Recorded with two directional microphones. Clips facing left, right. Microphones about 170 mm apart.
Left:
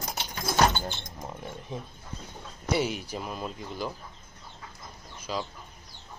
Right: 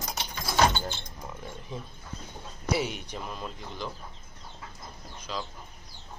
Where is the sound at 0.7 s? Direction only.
15° left (ahead or behind).